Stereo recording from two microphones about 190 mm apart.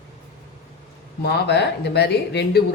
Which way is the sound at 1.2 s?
60° left (ahead or behind).